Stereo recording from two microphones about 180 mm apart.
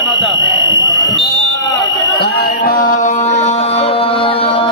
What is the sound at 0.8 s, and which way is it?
Fire alarm, 20° left (ahead or behind).